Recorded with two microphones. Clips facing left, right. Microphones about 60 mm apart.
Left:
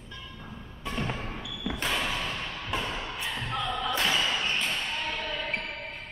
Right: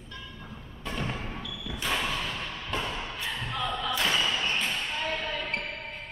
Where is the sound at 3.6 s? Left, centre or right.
Centre.